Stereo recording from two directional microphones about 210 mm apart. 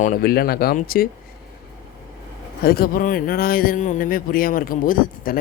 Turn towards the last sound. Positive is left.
turn(degrees=40)  # may be behind; listen again after turning